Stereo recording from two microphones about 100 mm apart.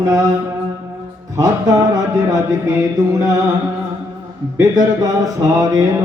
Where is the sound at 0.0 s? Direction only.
40° right (ahead or behind).